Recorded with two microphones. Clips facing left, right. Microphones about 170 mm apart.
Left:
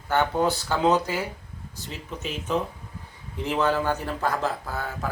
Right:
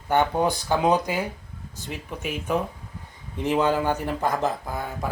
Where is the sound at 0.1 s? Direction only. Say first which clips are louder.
Right 1 dB; 15° right (ahead or behind).